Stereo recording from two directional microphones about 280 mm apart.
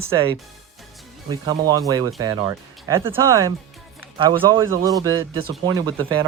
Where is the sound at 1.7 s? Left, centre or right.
Centre.